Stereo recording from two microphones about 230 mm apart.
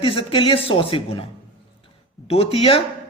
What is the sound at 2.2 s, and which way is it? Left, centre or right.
Speech, left.